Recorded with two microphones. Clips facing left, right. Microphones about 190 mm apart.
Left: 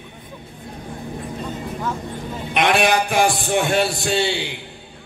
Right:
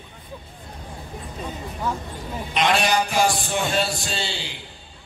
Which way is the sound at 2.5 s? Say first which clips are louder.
Left 3 dB; 55° left (ahead or behind).